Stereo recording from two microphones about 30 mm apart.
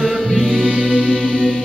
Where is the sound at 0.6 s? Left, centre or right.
Right.